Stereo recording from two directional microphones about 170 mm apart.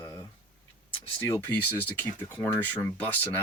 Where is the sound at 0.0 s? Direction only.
15° left (ahead or behind).